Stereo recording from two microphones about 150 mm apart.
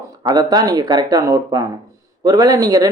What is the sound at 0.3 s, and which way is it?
Speech, 25° right (ahead or behind).